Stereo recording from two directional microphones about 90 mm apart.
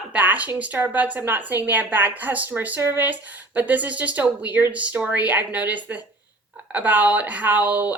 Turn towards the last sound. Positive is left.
turn(degrees=-15)  # may be behind; listen again after turning